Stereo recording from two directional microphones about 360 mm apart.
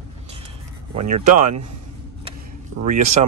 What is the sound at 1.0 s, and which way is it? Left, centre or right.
Speech, right.